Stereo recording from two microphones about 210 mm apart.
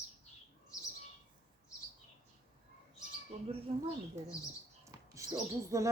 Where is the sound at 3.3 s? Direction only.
30° right (ahead or behind).